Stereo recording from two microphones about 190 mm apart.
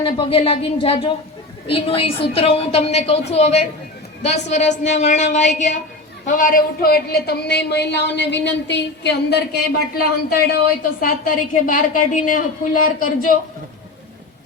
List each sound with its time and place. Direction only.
0.0 s a woman's voice: 30° left (ahead or behind); by 13.3 s 45° left (ahead or behind)